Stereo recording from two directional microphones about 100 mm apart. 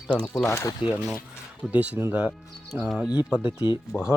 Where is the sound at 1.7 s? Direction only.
15° right (ahead or behind).